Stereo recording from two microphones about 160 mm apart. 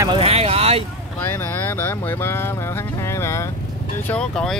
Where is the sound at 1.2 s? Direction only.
15° left (ahead or behind).